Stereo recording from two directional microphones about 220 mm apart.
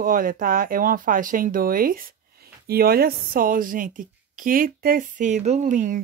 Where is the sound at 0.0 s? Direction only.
40° right (ahead or behind).